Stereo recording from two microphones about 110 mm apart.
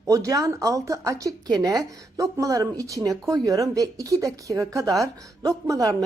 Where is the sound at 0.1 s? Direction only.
30° right (ahead or behind).